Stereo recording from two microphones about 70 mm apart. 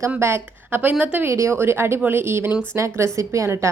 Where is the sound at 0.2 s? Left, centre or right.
Right.